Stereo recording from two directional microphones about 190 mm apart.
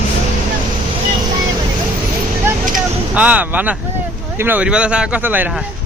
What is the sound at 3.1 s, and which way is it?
Speech, 5° right (ahead or behind).